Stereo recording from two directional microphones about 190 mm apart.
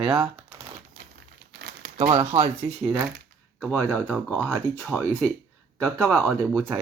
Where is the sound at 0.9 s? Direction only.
55° right (ahead or behind).